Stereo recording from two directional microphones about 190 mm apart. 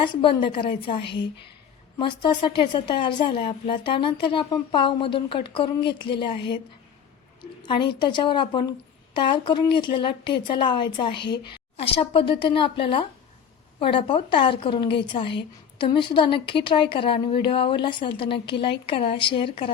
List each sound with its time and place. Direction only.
0.0 s a woman's voice: 25° left (ahead or behind)
7.6 s a woman's voice: 25° left (ahead or behind)